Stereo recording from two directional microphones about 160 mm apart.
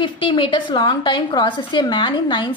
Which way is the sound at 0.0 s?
30° left (ahead or behind).